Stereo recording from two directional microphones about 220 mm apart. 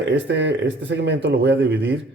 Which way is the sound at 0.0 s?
55° right (ahead or behind).